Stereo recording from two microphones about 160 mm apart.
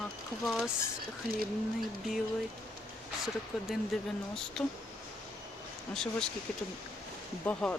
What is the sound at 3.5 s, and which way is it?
Speech, centre (ahead or behind).